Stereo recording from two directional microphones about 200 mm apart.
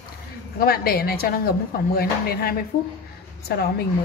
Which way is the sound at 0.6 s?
50° left (ahead or behind).